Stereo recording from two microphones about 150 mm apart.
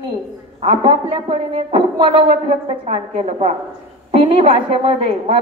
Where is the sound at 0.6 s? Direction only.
35° right (ahead or behind).